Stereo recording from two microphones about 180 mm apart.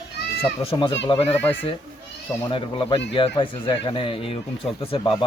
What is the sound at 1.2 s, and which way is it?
Speech, 10° left (ahead or behind).